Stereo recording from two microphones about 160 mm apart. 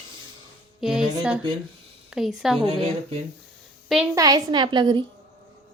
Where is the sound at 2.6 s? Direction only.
40° right (ahead or behind).